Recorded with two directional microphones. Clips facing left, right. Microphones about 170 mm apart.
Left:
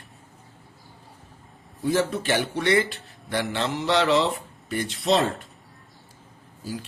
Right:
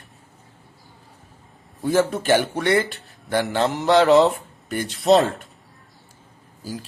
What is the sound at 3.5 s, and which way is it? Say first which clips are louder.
Speech: right 7 dB; 45° right (ahead or behind).